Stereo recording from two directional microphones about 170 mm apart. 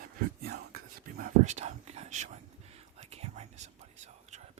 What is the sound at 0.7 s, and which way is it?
Whispering, 60° right (ahead or behind).